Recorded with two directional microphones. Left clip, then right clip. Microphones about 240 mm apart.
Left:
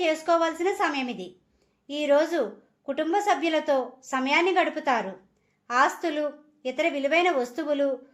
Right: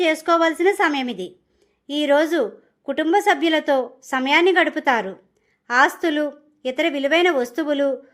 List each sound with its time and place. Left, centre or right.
0.0 s a woman's voice: right